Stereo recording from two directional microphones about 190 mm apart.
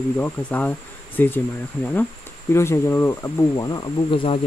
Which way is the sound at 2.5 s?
15° left (ahead or behind).